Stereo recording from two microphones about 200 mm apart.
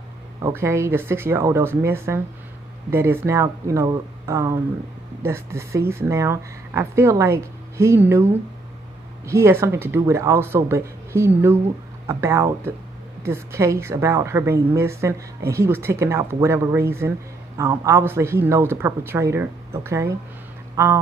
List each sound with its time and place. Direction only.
0.4 s a woman's voice: 15° right (ahead or behind)